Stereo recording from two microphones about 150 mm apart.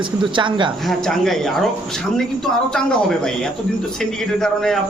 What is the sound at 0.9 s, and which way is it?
Speech, 5° left (ahead or behind).